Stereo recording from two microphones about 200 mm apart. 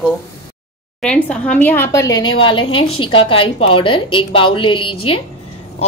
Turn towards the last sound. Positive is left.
turn(degrees=25)  # may be behind; listen again after turning